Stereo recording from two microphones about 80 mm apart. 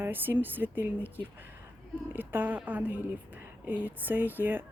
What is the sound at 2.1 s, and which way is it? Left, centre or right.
A woman's voice, right.